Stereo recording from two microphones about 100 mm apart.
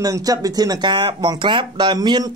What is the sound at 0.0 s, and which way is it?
Speech, 40° right (ahead or behind).